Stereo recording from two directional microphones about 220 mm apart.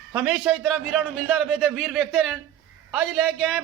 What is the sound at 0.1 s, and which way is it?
A man's voice, 5° right (ahead or behind).